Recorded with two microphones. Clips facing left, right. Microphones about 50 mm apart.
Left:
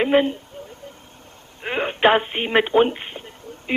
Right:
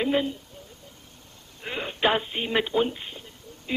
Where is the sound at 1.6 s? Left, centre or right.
Left.